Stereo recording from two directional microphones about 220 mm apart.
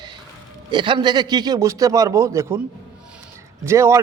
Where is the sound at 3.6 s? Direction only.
15° right (ahead or behind).